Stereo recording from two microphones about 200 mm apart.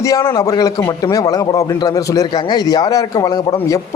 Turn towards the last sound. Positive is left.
turn(degrees=20)  # may be behind; listen again after turning